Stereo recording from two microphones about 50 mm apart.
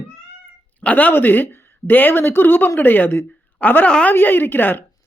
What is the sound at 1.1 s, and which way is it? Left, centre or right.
A woman's voice, left.